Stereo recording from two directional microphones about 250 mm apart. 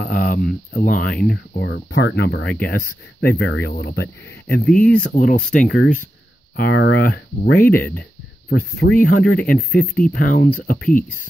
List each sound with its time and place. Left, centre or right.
0.0 s a sound: left
0.7 s speech: left
1.0 s speech: centre
1.6 s speech: left
4.6 s speech: centre
6.5 s speech: left
7.5 s speech: centre
8.5 s speech: left
9.7 s speech: centre
10.1 s speech: left